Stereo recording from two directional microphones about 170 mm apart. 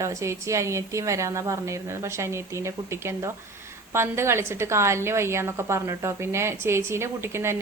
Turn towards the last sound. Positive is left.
turn(degrees=-15)  # may be behind; listen again after turning